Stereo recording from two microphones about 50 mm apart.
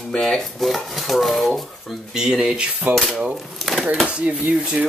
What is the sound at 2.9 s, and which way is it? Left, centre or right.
Speech, right.